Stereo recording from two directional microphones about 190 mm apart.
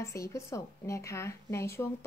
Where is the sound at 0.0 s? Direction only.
15° left (ahead or behind).